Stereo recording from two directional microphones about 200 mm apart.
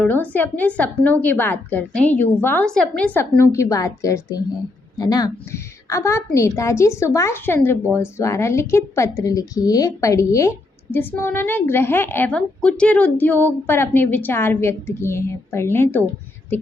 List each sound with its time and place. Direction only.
0.0 s a woman's voice: 10° left (ahead or behind)